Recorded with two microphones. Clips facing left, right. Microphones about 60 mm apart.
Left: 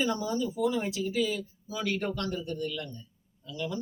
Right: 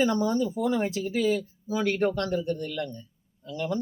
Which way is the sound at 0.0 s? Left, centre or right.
Right.